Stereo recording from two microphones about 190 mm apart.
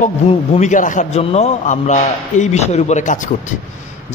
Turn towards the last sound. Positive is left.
turn(degrees=40)  # may be behind; listen again after turning